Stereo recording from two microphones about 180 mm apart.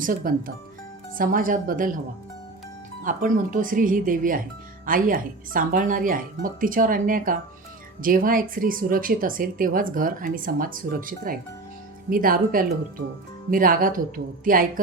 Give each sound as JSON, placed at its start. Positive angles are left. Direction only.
{"t": 0.0, "sound": "a woman's voice", "side_deg": -50}
{"t": 3.0, "sound": "a woman's voice", "side_deg": -45}